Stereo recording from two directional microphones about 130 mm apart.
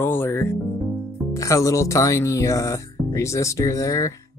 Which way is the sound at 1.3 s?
25° left (ahead or behind).